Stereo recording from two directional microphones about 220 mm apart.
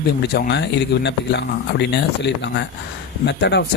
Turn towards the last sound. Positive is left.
turn(degrees=50)  # may be behind; listen again after turning